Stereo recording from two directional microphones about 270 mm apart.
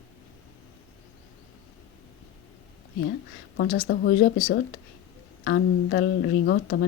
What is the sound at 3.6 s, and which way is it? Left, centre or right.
Speech, left.